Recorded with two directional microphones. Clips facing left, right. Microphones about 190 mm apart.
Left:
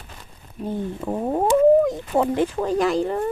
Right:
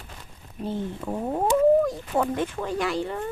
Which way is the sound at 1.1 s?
25° left (ahead or behind).